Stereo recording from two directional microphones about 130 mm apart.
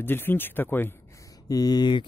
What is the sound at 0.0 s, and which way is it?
Speech, 15° left (ahead or behind).